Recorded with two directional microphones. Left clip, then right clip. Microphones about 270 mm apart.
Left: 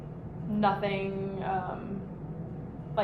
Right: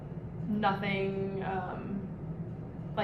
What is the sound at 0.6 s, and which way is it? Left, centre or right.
Speech, centre.